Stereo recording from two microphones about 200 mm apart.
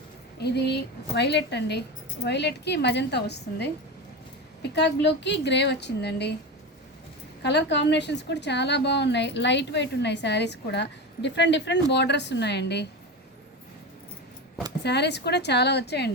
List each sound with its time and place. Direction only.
0.3 s a woman's voice: 55° left (ahead or behind)
4.7 s a woman's voice: 60° left (ahead or behind)
7.4 s a woman's voice: 60° left (ahead or behind)
14.8 s a woman's voice: 55° left (ahead or behind)